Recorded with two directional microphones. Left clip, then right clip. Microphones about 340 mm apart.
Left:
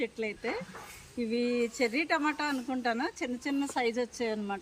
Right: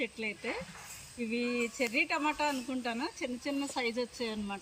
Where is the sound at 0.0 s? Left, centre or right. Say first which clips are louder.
Left 3 dB; centre.